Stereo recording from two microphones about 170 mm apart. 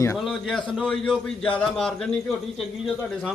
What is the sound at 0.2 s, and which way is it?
A man's voice, centre (ahead or behind).